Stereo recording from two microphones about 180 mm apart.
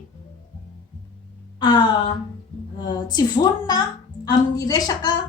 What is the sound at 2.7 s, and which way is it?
Speech, 25° left (ahead or behind).